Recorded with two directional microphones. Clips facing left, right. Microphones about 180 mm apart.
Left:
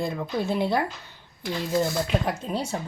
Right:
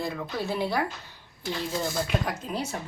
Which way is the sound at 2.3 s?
30° left (ahead or behind).